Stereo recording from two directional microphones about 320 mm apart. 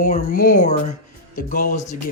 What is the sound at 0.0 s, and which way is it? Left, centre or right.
Speech, left.